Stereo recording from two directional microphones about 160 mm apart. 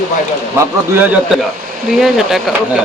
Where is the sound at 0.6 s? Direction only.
15° right (ahead or behind).